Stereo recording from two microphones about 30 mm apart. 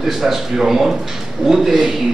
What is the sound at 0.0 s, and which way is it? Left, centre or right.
A man's voice, centre.